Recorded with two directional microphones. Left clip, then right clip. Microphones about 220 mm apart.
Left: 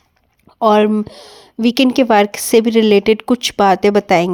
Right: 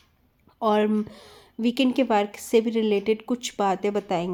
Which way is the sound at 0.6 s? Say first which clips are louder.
Left 10 dB; 30° left (ahead or behind).